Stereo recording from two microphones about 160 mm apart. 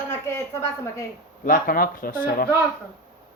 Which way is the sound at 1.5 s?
60° left (ahead or behind).